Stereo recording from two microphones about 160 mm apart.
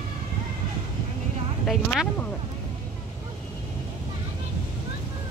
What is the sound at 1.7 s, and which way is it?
Speech, centre (ahead or behind).